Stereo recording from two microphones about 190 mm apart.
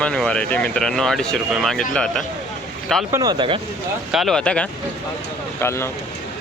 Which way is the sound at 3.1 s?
20° right (ahead or behind).